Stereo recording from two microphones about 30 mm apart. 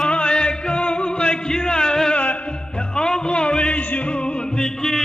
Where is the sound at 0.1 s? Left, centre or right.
Left.